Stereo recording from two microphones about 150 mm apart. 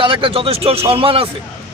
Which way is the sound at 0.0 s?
35° right (ahead or behind).